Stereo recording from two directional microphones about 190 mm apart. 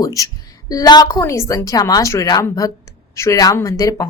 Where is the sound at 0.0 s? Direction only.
15° left (ahead or behind).